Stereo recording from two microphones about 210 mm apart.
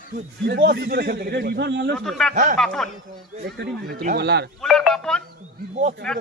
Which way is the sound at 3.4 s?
50° right (ahead or behind).